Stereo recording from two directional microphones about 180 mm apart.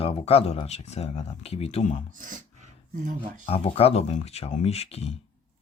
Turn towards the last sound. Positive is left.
turn(degrees=35)  # may be behind; listen again after turning